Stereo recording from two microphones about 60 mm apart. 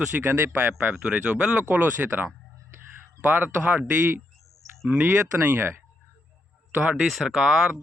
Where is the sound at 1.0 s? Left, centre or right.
Right.